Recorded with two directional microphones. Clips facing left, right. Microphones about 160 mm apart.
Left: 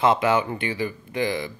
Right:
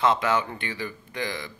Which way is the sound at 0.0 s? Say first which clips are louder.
Left 3 dB; 15° left (ahead or behind).